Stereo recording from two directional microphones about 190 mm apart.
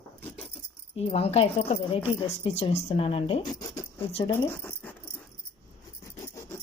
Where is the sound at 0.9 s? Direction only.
30° left (ahead or behind).